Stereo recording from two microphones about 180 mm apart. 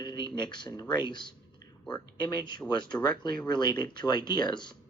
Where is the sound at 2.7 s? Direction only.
25° left (ahead or behind).